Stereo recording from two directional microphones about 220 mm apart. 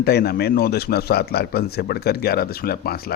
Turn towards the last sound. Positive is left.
turn(degrees=45)  # may be behind; listen again after turning